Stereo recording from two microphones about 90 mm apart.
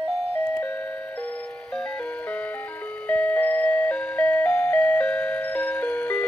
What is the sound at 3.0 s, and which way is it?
Music, 15° left (ahead or behind).